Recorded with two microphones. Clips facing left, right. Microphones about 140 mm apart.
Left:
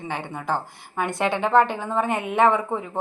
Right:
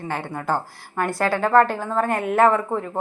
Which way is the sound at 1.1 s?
20° left (ahead or behind).